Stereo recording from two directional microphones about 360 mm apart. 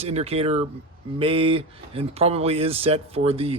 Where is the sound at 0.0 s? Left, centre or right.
Centre.